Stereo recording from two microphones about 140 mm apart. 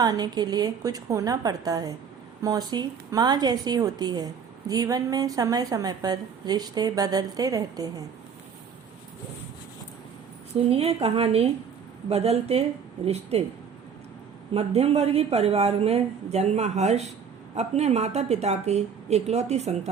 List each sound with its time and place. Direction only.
0.0 s a woman's voice: 30° right (ahead or behind)
10.7 s a woman's voice: 45° right (ahead or behind)
14.5 s a woman's voice: 45° right (ahead or behind)